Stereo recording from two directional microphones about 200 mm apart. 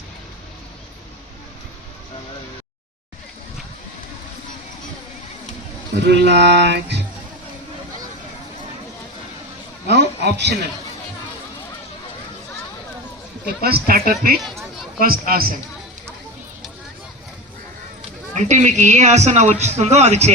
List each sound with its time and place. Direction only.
6.0 s a sound: 60° right (ahead or behind)
9.8 s a sound: 55° right (ahead or behind)
13.6 s speech: 50° right (ahead or behind)
14.3 s speech: centre (ahead or behind)
14.9 s speech: 45° right (ahead or behind)
18.3 s a man's voice: 35° right (ahead or behind)